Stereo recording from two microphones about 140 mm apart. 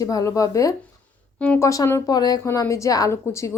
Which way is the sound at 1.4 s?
15° left (ahead or behind).